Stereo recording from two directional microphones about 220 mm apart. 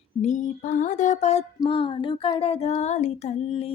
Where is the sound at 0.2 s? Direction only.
35° left (ahead or behind).